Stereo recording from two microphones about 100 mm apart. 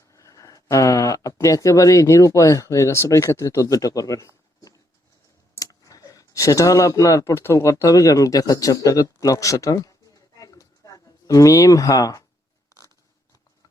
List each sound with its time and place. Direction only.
0.1 s speech: 35° left (ahead or behind)